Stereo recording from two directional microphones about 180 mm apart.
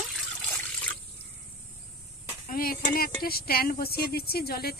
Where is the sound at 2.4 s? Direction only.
55° left (ahead or behind).